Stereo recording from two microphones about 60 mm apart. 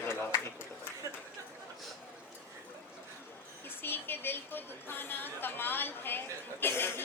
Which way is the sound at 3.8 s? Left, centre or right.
Left.